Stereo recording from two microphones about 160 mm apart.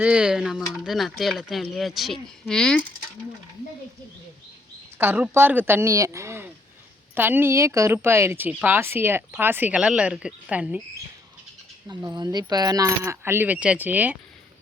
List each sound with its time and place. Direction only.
0.0 s speech: 5° right (ahead or behind)
4.9 s a woman's voice: 10° right (ahead or behind)
11.9 s a woman's voice: 25° right (ahead or behind); by 14.2 s 10° right (ahead or behind)